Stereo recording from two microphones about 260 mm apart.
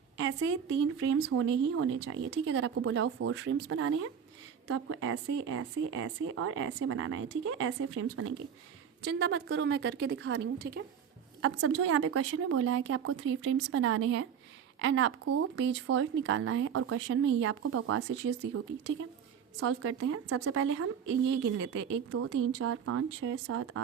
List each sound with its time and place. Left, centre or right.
0.2 s speech: right
9.0 s a woman's voice: right
11.4 s speech: right
22.1 s speech: right